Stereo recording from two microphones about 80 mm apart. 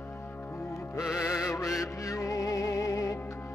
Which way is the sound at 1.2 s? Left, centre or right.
Left.